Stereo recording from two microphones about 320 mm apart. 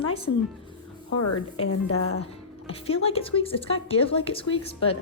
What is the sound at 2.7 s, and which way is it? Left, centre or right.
Speech, centre.